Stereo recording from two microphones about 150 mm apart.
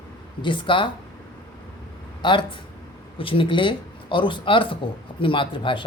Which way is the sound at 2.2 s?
30° left (ahead or behind).